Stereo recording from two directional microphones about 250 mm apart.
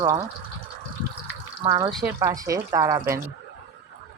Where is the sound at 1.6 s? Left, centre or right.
Centre.